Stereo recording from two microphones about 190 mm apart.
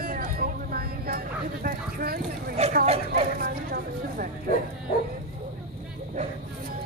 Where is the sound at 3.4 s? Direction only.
50° right (ahead or behind).